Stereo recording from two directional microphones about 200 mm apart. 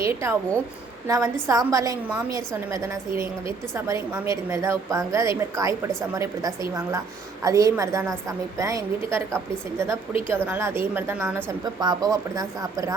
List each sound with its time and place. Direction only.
0.0 s a woman's voice: 15° right (ahead or behind)